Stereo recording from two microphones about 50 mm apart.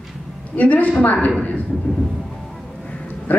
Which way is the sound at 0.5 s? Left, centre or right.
Left.